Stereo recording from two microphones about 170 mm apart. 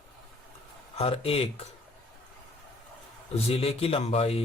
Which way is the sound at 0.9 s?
35° left (ahead or behind).